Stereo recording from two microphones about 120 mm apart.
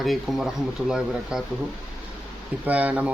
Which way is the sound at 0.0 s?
Centre (ahead or behind).